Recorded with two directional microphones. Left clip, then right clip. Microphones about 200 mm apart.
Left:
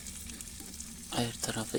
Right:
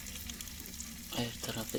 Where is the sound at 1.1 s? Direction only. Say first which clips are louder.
Left 4 dB; 20° left (ahead or behind).